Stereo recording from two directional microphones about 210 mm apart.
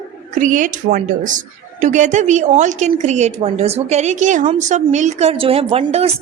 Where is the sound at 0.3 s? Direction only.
35° right (ahead or behind).